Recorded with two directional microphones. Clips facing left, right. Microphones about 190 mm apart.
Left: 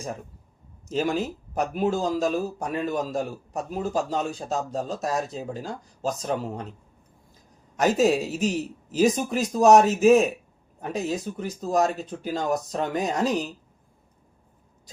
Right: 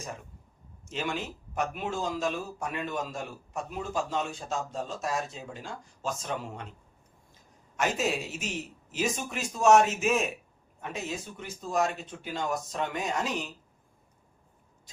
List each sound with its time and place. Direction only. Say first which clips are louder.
0.9 s a man's voice: left 8 dB; 40° left (ahead or behind)
7.8 s a man's voice: left 9 dB; 40° left (ahead or behind)